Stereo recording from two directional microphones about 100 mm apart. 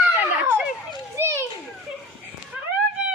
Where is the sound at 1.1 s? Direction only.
25° right (ahead or behind).